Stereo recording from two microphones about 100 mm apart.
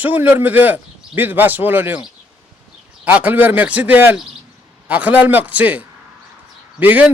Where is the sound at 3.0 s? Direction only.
15° right (ahead or behind).